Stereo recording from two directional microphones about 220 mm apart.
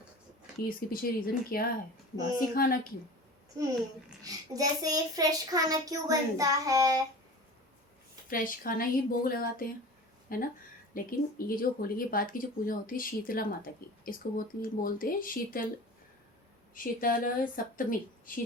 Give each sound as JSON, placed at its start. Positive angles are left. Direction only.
{"t": 0.7, "sound": "speech", "side_deg": 40}
{"t": 3.6, "sound": "child singing", "side_deg": -15}
{"t": 8.3, "sound": "speech", "side_deg": 40}
{"t": 16.7, "sound": "speech", "side_deg": 40}